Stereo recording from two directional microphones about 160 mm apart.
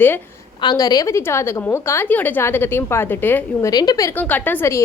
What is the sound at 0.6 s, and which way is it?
A woman's voice, 25° left (ahead or behind).